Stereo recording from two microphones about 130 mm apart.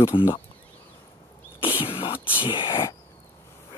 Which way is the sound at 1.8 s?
45° left (ahead or behind).